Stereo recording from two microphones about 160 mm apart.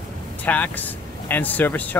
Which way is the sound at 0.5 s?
10° left (ahead or behind).